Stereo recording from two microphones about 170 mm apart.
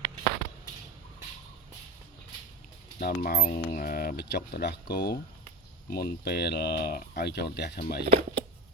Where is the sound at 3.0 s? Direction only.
60° left (ahead or behind).